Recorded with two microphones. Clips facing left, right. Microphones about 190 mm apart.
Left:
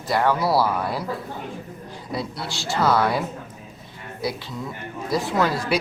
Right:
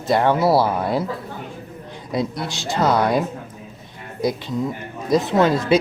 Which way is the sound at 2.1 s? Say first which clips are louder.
Right 6 dB; 20° right (ahead or behind).